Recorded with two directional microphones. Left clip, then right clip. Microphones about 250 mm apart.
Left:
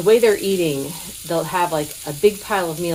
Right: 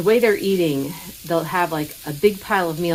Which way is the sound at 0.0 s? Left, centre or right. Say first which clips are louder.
Left 2 dB; centre.